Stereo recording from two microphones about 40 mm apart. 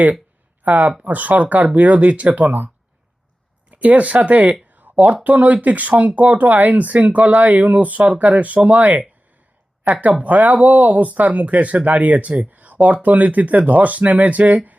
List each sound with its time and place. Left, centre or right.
0.6 s speech: right
4.7 s a sound: right
5.2 s speech: right